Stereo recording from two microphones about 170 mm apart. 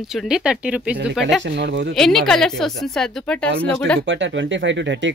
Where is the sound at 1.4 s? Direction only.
90° right.